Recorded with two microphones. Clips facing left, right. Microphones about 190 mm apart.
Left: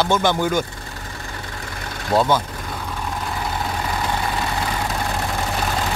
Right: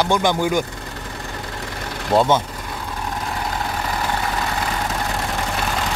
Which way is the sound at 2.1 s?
20° right (ahead or behind).